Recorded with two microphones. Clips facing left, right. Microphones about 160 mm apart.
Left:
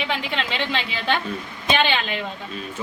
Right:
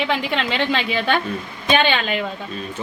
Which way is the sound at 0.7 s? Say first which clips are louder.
Right 4 dB; 45° right (ahead or behind).